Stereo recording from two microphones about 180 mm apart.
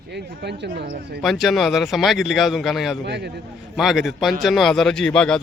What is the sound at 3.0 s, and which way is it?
Speech, 70° right (ahead or behind).